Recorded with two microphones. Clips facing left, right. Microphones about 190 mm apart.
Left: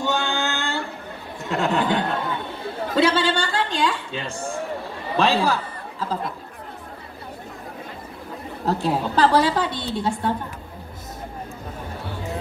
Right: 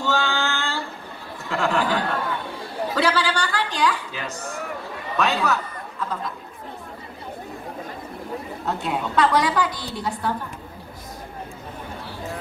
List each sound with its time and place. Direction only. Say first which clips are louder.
0.0 s a sound: even; 20° left (ahead or behind)
1.5 s a woman's voice: left 1 dB; 20° left (ahead or behind)
8.6 s a woman's voice: left 5 dB; 35° left (ahead or behind)